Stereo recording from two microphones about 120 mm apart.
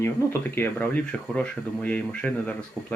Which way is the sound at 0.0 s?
15° left (ahead or behind).